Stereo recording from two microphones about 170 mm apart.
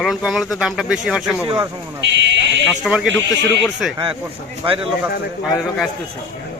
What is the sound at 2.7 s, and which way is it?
Speech, 5° right (ahead or behind).